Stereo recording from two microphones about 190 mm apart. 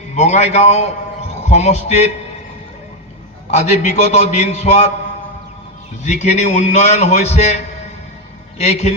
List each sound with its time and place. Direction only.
0.2 s a man's voice: 35° left (ahead or behind)
3.5 s a man's voice: 35° left (ahead or behind)
6.1 s a man's voice: 40° left (ahead or behind)